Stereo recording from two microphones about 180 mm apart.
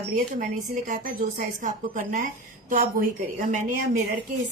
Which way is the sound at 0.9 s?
45° right (ahead or behind).